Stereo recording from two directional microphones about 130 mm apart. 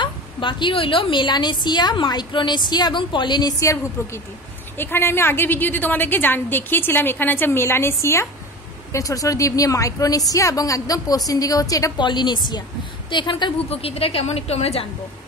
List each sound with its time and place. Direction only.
0.0 s a woman's voice: 35° left (ahead or behind)